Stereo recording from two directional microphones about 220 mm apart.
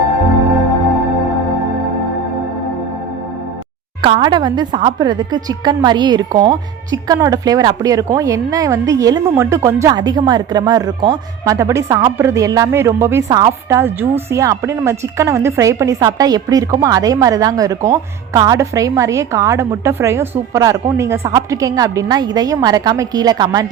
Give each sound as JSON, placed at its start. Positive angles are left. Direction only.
{"t": 4.0, "sound": "a woman's voice", "side_deg": -20}